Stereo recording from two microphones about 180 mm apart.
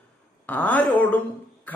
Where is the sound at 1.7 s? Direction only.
10° left (ahead or behind).